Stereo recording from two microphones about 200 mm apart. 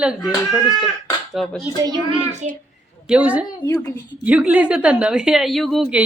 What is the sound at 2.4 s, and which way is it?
Speech, 35° right (ahead or behind).